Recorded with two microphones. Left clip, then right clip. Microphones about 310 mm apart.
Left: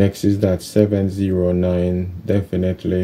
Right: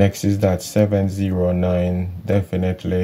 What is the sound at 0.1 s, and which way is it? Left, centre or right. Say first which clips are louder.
Speech: left 1 dB; centre.